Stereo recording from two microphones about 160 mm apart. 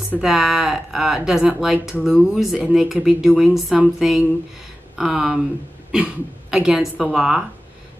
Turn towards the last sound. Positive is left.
turn(degrees=-5)  # may be behind; listen again after turning